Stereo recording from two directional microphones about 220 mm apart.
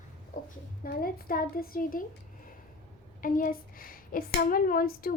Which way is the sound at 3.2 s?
40° left (ahead or behind).